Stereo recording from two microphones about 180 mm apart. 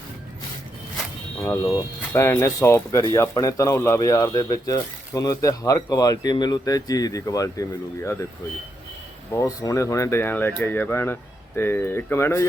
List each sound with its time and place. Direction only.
1.4 s speech: 15° left (ahead or behind)
9.3 s speech: 20° left (ahead or behind)